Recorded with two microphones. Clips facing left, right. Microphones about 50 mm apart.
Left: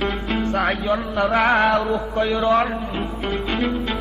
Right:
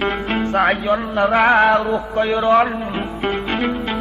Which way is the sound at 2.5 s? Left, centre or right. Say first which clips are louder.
Right 4 dB; centre.